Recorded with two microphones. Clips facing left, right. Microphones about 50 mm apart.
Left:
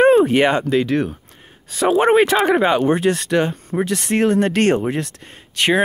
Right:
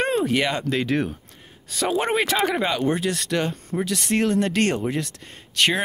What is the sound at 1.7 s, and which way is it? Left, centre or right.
Speech, left.